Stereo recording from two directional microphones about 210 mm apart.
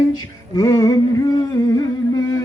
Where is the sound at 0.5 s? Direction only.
15° left (ahead or behind).